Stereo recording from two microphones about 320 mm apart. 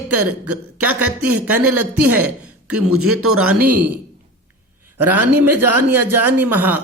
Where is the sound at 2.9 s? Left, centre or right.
Right.